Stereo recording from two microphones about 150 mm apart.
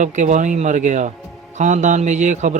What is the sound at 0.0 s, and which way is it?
A man's voice, 55° right (ahead or behind).